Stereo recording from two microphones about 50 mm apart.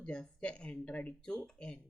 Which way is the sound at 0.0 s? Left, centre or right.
Centre.